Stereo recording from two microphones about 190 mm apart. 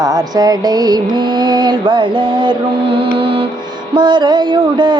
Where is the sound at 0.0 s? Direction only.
20° right (ahead or behind).